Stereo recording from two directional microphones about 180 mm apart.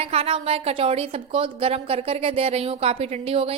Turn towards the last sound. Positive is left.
turn(degrees=-35)  # may be behind; listen again after turning